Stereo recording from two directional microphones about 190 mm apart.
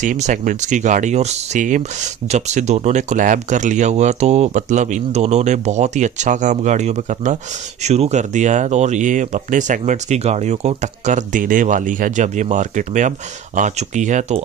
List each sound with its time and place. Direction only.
0.0 s speech: 40° right (ahead or behind)